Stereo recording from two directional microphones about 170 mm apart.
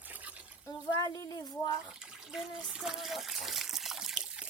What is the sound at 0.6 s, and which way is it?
Speech, 20° left (ahead or behind).